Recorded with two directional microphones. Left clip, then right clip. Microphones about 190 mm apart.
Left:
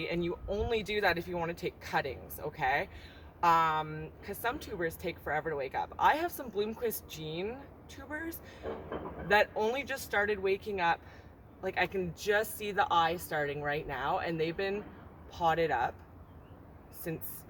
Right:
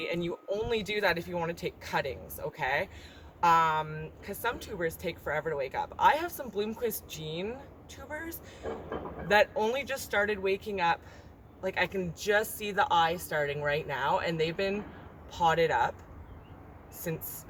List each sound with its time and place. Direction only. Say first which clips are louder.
0.0 s speech: right 1 dB; 5° right (ahead or behind)
8.7 s speech: right 2 dB; 20° right (ahead or behind)
9.2 s speech: right 2 dB; 5° right (ahead or behind)
17.1 s speech: right 3 dB; 5° right (ahead or behind)